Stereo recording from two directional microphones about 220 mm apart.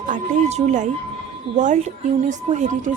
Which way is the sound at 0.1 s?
30° right (ahead or behind).